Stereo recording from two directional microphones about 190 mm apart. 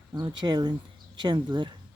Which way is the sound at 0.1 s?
20° right (ahead or behind).